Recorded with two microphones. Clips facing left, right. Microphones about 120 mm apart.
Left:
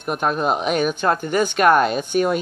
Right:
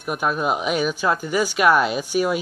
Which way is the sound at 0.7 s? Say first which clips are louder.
Left 2 dB; 55° left (ahead or behind).